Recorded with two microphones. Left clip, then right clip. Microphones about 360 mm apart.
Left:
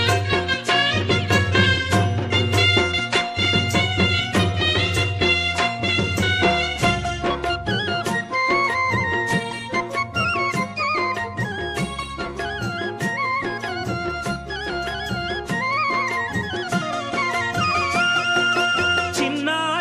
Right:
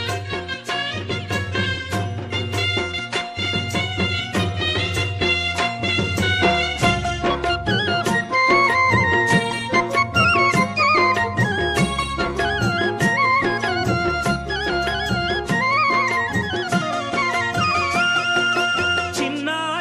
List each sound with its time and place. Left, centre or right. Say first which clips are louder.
0.7 s music: left 6 dB; left; by 13.5 s right
15.5 s music: right 3 dB; right
16.7 s music: right 2 dB; centre